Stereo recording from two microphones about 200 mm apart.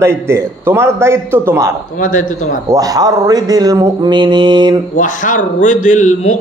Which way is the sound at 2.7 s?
15° right (ahead or behind).